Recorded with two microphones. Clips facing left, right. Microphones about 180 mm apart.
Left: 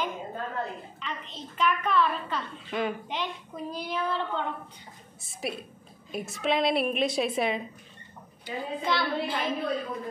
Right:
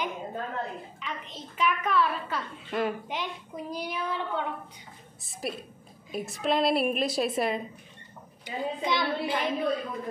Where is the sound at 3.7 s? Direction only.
10° right (ahead or behind).